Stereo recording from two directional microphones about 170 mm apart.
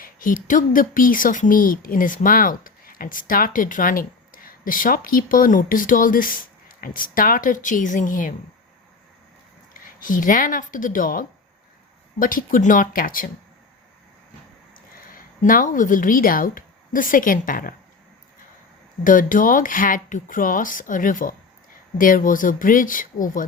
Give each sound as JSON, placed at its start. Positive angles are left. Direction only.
{"t": 0.0, "sound": "speech", "side_deg": 55}
{"t": 9.8, "sound": "speech", "side_deg": 55}
{"t": 14.7, "sound": "speech", "side_deg": 55}
{"t": 19.0, "sound": "speech", "side_deg": 50}